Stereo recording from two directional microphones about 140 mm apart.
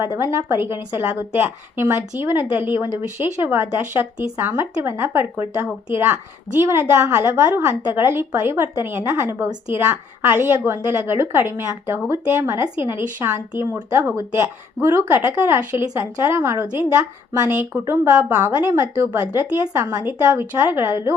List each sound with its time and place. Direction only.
0.0 s a woman's voice: 20° right (ahead or behind)